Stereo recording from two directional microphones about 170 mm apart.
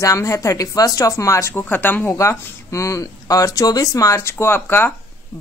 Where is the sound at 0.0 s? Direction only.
20° left (ahead or behind).